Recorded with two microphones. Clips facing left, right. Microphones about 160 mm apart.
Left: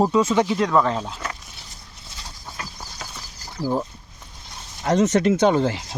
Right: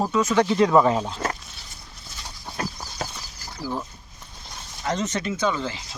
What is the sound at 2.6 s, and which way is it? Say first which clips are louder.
Clip-clop: right 7 dB; 45° right (ahead or behind).